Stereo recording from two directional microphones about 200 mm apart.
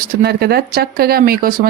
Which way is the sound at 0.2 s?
50° right (ahead or behind).